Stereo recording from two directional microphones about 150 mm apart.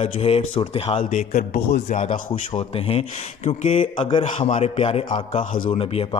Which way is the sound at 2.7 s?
40° left (ahead or behind).